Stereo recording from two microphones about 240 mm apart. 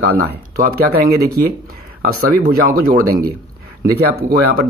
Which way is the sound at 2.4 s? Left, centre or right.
Right.